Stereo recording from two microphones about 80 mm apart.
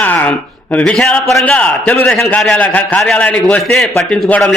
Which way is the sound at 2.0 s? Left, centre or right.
Centre.